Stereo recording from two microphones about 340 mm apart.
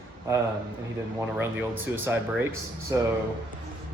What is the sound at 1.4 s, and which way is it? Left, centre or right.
Speech, centre.